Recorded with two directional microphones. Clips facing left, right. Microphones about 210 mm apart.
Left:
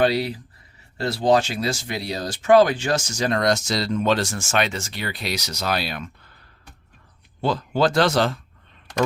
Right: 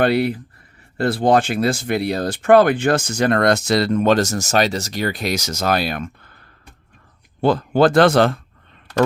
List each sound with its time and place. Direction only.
0.0 s speech: 55° right (ahead or behind)
7.4 s speech: 55° right (ahead or behind)